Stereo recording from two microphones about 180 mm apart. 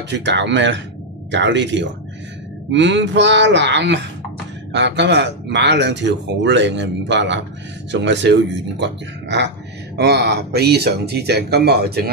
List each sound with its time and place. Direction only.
0.1 s a man's voice: 75° right (ahead or behind)